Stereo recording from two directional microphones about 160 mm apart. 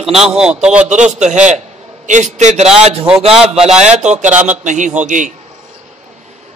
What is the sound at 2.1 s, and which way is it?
Speech, 50° right (ahead or behind).